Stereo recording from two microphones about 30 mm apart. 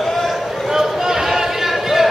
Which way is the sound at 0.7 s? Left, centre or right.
Centre.